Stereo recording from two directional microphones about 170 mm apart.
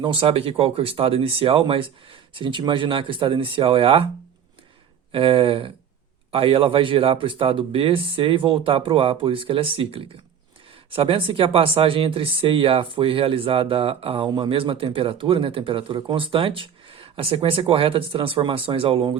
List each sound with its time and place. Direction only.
0.0 s speech: 30° right (ahead or behind)
5.1 s speech: 30° right (ahead or behind)